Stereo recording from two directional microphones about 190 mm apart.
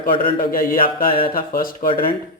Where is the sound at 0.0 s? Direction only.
50° left (ahead or behind).